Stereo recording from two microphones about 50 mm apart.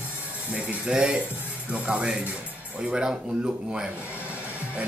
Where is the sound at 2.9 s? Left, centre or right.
Centre.